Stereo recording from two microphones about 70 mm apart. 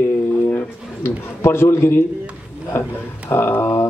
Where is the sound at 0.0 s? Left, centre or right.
Left.